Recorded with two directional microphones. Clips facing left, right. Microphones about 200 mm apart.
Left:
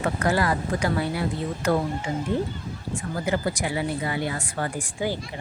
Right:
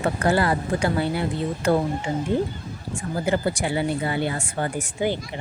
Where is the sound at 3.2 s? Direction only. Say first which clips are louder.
Right 3 dB; 30° right (ahead or behind).